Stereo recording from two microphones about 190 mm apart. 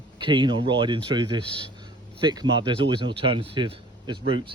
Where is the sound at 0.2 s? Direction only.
25° right (ahead or behind).